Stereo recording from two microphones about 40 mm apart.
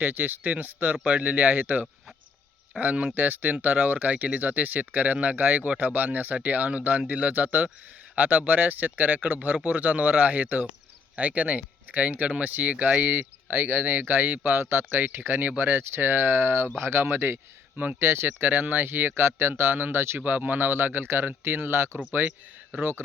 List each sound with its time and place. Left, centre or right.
0.0 s speech: right
2.7 s speech: right
3.2 s speech: right
13.1 s speech: right
14.4 s speech: right
16.7 s speech: right
20.6 s speech: right
22.1 s speech: right
22.8 s speech: right